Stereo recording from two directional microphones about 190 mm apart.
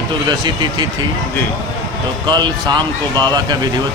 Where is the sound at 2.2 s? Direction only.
25° right (ahead or behind).